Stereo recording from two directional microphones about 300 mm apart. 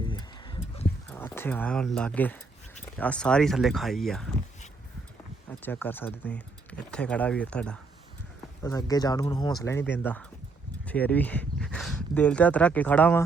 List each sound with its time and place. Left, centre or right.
0.0 s a sound: centre
3.0 s speech: centre
5.5 s speech: centre